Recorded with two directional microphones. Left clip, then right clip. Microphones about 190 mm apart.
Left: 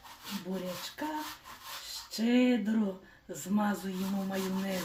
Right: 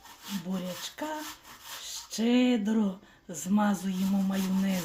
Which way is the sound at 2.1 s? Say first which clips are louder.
Right 2 dB; 40° right (ahead or behind).